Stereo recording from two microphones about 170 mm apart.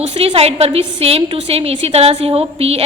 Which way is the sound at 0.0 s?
35° right (ahead or behind).